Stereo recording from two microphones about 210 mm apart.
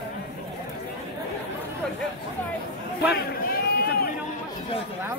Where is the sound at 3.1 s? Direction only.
50° left (ahead or behind).